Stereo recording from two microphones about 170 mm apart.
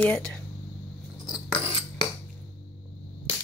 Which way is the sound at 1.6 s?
35° left (ahead or behind).